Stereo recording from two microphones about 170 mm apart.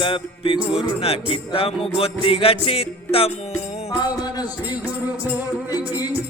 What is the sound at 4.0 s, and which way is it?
Music, 25° left (ahead or behind).